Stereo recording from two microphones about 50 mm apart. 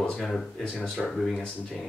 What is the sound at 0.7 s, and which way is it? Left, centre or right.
Speech, centre.